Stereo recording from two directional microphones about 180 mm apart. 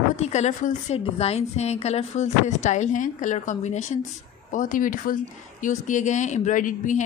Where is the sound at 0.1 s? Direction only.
40° left (ahead or behind).